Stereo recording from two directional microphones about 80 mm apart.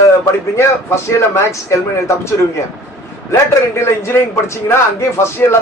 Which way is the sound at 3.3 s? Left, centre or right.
Left.